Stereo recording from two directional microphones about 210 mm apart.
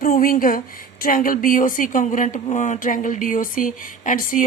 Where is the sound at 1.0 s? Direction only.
40° left (ahead or behind).